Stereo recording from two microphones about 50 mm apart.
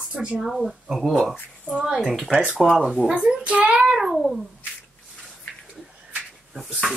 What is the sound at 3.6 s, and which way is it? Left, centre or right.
Speech, centre.